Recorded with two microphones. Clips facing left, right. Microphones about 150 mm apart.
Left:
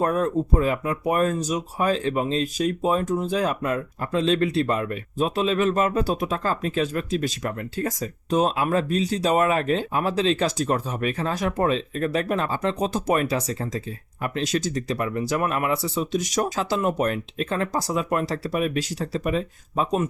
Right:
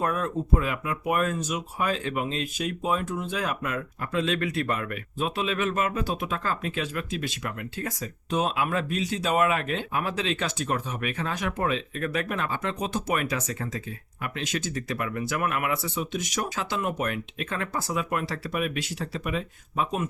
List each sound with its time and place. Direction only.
0.0 s speech: 35° left (ahead or behind)
5.1 s speech: 40° left (ahead or behind)